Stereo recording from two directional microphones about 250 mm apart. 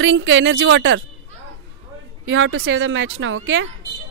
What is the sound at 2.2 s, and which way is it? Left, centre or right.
Speech, right.